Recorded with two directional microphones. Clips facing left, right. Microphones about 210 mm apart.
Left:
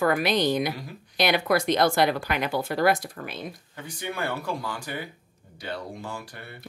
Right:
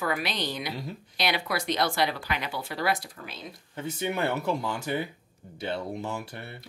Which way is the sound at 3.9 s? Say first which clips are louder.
Right 3 dB; 25° right (ahead or behind).